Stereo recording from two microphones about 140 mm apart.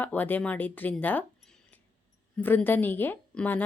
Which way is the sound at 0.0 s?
10° left (ahead or behind).